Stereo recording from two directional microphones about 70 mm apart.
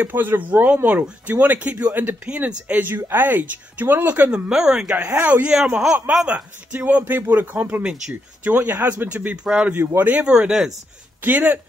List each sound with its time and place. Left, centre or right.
0.0 s speech: right
4.3 s speech: centre
9.8 s speech: right
10.2 s speech: centre
11.2 s speech: right